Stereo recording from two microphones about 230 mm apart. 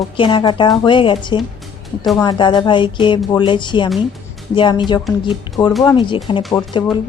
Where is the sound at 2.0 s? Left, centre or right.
Centre.